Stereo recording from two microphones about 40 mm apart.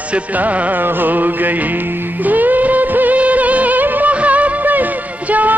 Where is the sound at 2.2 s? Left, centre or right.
Right.